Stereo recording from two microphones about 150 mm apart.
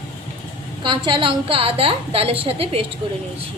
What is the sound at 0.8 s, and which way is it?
A woman's voice, 35° right (ahead or behind).